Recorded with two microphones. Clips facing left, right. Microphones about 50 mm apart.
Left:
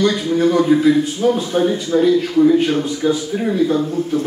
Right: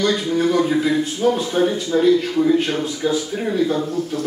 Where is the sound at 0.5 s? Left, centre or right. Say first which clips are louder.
Left 6 dB; centre.